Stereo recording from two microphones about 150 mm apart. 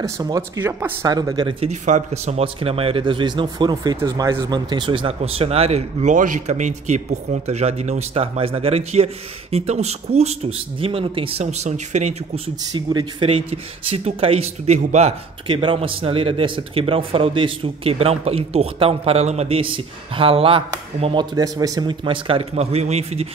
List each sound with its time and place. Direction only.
0.0 s speech: 25° right (ahead or behind)
1.0 s speech: 25° right (ahead or behind)
1.7 s a man's voice: 50° right (ahead or behind)
12.7 s speech: 35° right (ahead or behind)
15.4 s speech: 35° right (ahead or behind)